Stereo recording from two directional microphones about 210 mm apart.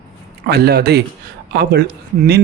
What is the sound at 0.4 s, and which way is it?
Speech, 50° right (ahead or behind).